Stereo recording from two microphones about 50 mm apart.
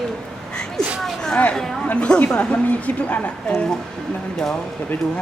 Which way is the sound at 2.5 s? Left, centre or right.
Left.